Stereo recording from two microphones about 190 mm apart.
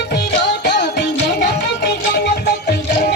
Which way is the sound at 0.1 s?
60° left (ahead or behind).